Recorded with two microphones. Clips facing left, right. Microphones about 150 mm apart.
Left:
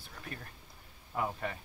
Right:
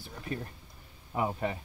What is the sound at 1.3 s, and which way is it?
Speech, 20° right (ahead or behind).